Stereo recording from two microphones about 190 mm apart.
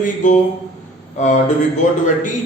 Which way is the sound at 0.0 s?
40° left (ahead or behind).